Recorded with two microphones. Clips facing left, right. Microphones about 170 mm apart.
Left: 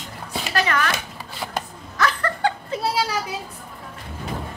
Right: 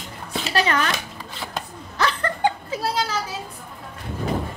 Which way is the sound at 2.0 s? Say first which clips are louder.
Even; 25° right (ahead or behind).